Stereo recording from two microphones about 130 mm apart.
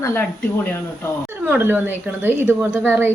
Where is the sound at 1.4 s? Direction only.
15° right (ahead or behind).